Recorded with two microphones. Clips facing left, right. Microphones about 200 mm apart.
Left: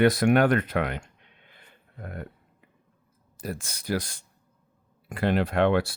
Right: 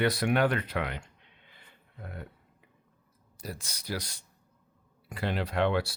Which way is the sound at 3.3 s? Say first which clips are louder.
Left 6 dB; 50° left (ahead or behind).